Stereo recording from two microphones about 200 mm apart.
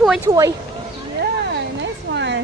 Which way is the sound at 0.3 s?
15° right (ahead or behind).